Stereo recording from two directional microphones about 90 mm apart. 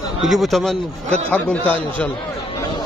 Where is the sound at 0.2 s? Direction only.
Centre (ahead or behind).